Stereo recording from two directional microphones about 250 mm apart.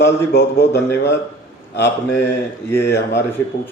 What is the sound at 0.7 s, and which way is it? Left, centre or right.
Speech, centre.